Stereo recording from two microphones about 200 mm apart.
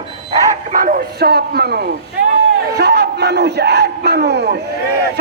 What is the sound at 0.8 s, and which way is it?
Speech, 45° right (ahead or behind).